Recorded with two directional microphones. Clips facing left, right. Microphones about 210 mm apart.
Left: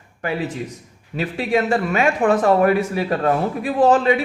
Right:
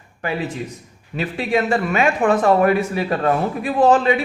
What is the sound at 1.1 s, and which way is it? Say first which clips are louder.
A man's voice: even; 40° left (ahead or behind).